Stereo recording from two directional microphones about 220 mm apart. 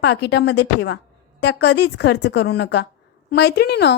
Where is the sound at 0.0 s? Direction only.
50° left (ahead or behind).